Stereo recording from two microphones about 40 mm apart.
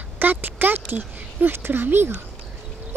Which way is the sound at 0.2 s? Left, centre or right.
Right.